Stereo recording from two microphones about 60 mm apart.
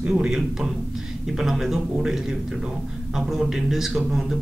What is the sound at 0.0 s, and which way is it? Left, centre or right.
A man's voice, centre.